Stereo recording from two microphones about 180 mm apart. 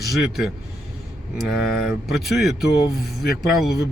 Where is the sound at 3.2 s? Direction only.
60° left (ahead or behind).